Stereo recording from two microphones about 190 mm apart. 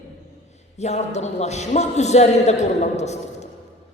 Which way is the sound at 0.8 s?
35° left (ahead or behind).